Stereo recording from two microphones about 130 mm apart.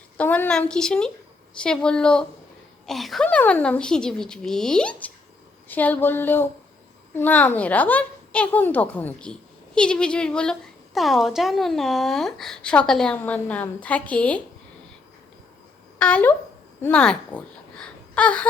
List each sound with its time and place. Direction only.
0.2 s a woman's voice: 10° left (ahead or behind)
3.2 s a woman's voice: 10° left (ahead or behind)
16.0 s speech: 10° left (ahead or behind)